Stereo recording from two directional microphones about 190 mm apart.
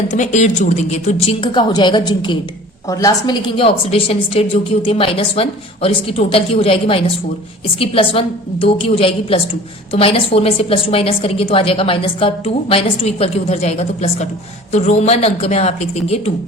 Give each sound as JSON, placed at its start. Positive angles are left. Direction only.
{"t": 0.1, "sound": "a woman's voice", "side_deg": 35}